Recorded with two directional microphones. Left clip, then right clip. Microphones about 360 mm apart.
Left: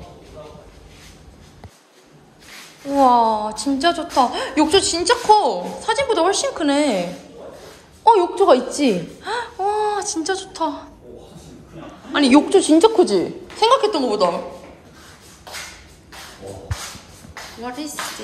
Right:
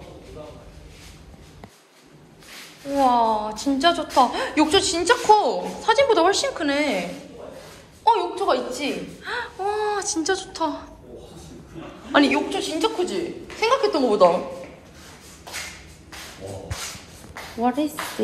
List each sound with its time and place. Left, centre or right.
3.0 s a woman's voice: centre
12.3 s a woman's voice: left; by 14.3 s centre
17.3 s a sound: centre